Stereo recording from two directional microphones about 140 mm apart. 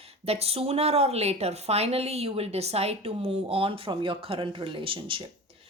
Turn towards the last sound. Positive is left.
turn(degrees=-40)  # may be behind; listen again after turning